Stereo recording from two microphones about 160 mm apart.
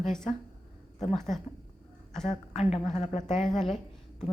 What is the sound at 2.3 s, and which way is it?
A woman's voice, 45° left (ahead or behind).